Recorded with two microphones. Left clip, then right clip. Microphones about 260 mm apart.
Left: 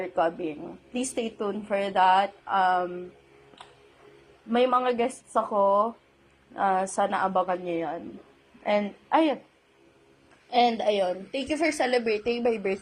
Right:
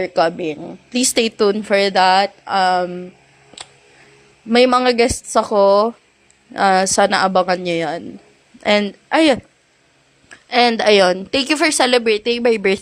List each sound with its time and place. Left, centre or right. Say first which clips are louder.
0.0 s a woman's voice: right 10 dB; right
4.5 s a woman's voice: right 10 dB; right
10.5 s a woman's voice: right 10 dB; right